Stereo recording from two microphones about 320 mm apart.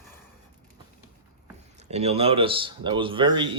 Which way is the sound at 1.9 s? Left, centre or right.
Centre.